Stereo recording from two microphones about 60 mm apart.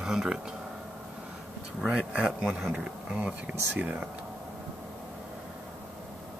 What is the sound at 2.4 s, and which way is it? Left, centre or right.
Speech, centre.